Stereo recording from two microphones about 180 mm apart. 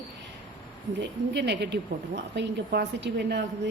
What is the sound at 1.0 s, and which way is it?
A woman's voice, 70° right (ahead or behind).